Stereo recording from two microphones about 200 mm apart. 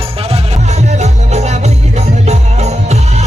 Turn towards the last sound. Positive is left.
turn(degrees=-35)  # may be behind; listen again after turning